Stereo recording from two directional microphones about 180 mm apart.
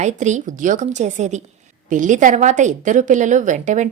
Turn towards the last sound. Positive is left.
turn(degrees=-45)  # may be behind; listen again after turning